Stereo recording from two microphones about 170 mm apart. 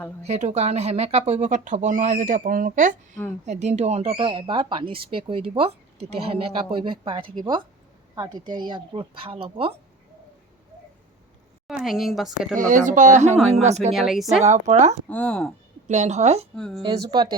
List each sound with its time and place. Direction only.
0.2 s speech: 40° right (ahead or behind)
11.7 s a woman's voice: centre (ahead or behind)
12.5 s speech: 50° right (ahead or behind)
13.9 s a woman's voice: centre (ahead or behind)
14.4 s speech: 45° right (ahead or behind)
15.1 s a woman's voice: 5° left (ahead or behind)
15.9 s speech: 45° right (ahead or behind)
16.6 s a woman's voice: 5° left (ahead or behind)
16.8 s speech: 25° right (ahead or behind)